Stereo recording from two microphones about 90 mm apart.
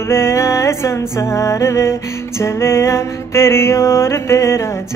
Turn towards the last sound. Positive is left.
turn(degrees=30)  # may be behind; listen again after turning